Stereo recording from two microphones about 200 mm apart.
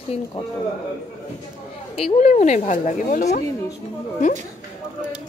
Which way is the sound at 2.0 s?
30° left (ahead or behind).